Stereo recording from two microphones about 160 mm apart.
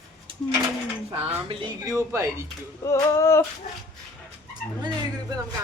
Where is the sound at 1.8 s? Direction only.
20° right (ahead or behind).